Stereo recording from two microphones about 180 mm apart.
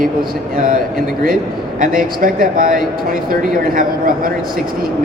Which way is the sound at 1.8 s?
50° right (ahead or behind).